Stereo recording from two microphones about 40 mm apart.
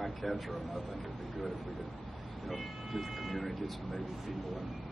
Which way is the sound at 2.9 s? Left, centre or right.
Centre.